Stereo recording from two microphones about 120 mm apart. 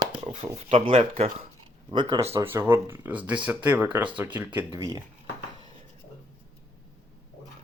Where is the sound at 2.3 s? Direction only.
20° right (ahead or behind).